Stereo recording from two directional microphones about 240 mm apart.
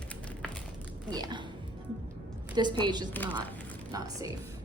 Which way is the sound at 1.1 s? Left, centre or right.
Centre.